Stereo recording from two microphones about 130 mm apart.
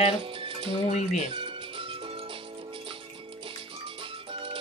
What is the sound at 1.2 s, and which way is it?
Music, 45° right (ahead or behind).